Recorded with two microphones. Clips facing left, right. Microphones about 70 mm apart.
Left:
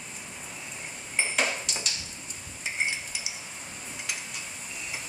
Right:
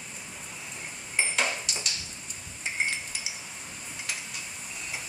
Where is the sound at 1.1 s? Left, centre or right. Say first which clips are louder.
Even; centre.